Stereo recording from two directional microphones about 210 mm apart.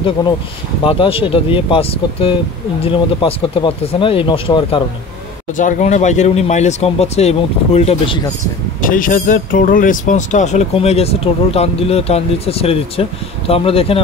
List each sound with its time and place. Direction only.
0.8 s speech: 25° left (ahead or behind)
5.6 s speech: 35° left (ahead or behind)
8.8 s speech: 40° left (ahead or behind)